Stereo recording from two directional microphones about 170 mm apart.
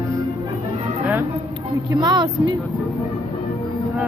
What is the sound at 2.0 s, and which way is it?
Speech, 25° right (ahead or behind).